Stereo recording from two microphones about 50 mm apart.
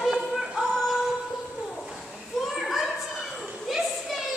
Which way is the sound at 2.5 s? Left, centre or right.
Centre.